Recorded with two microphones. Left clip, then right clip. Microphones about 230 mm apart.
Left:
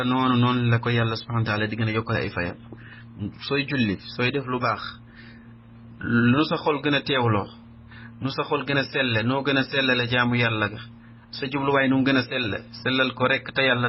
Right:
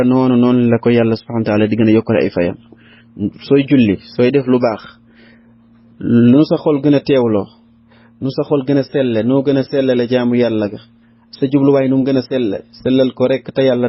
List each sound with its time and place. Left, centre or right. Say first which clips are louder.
0.0 s a man's voice: right 9 dB; right
6.0 s a man's voice: right 10 dB; right